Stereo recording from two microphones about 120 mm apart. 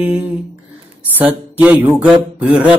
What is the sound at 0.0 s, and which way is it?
Mantra, 15° right (ahead or behind).